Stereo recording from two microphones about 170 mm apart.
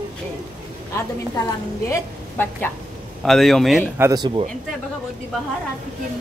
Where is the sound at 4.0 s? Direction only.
25° right (ahead or behind).